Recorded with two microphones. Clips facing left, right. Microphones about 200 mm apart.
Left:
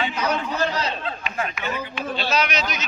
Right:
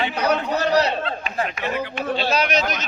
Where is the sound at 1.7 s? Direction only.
65° right (ahead or behind).